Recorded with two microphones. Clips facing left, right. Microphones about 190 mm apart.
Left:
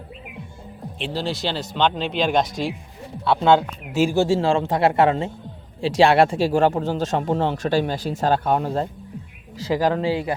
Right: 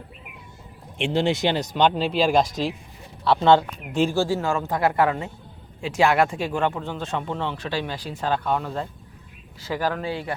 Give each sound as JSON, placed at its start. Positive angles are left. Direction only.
{"t": 1.1, "sound": "speech", "side_deg": -20}
{"t": 4.1, "sound": "speech", "side_deg": 25}
{"t": 9.6, "sound": "speech", "side_deg": 20}